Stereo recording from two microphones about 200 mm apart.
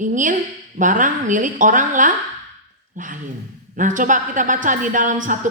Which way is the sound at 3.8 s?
40° right (ahead or behind).